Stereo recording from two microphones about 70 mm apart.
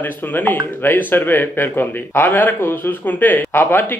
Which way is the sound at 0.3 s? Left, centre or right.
Left.